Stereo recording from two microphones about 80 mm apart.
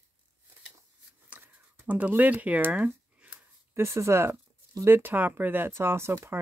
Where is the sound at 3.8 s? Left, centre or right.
Right.